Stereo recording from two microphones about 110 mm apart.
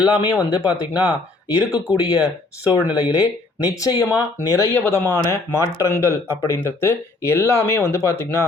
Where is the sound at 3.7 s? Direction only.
30° left (ahead or behind).